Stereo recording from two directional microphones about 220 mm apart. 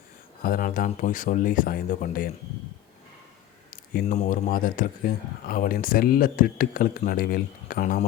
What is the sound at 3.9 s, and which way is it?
Speech, 35° left (ahead or behind).